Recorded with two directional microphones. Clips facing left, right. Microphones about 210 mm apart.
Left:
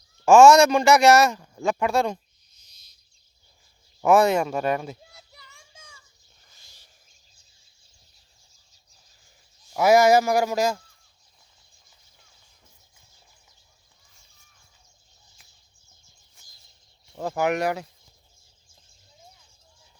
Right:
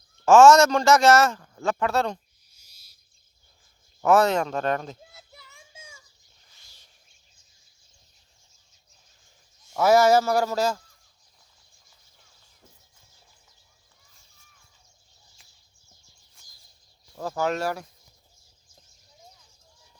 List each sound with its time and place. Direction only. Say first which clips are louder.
0.3 s speech: left 1 dB; 10° left (ahead or behind)
2.6 s owl: even; 10° right (ahead or behind)
4.0 s speech: left 2 dB; 10° left (ahead or behind)
5.0 s child singing: right 1 dB; centre (ahead or behind)
9.7 s speech: left 1 dB; 10° left (ahead or behind)
17.2 s speech: left 3 dB; 15° left (ahead or behind)